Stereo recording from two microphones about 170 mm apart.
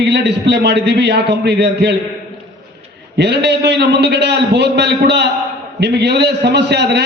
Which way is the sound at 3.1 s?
80° right.